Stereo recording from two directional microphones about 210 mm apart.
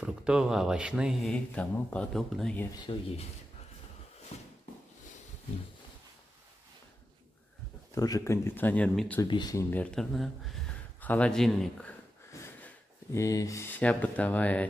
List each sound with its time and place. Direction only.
0.0 s speech: 5° right (ahead or behind)
2.8 s speech: 25° left (ahead or behind)
7.9 s speech: 15° left (ahead or behind)
9.2 s speech: 20° left (ahead or behind)